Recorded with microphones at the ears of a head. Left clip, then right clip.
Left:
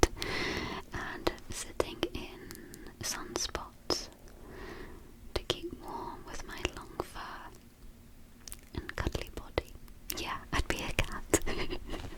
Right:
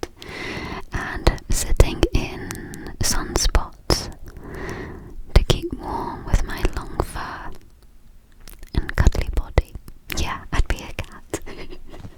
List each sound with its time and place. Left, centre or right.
0.5 s whispering: right
8.7 s whispering: right
10.9 s whispering: centre